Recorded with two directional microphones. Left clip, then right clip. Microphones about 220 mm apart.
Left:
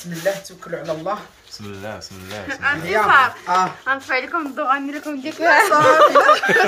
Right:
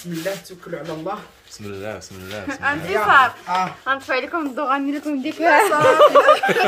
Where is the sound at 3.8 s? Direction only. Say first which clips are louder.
Left 1 dB; 35° right (ahead or behind).